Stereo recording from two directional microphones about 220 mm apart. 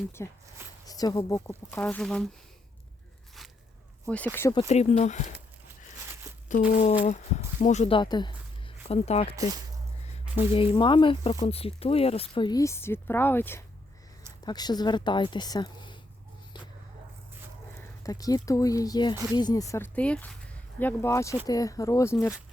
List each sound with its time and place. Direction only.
0.2 s speech: 15° left (ahead or behind)
4.0 s speech: 5° left (ahead or behind)
4.7 s speech: 30° left (ahead or behind)
6.5 s speech: 35° left (ahead or behind)
10.5 s speech: 25° left (ahead or behind)
17.7 s speech: 15° left (ahead or behind)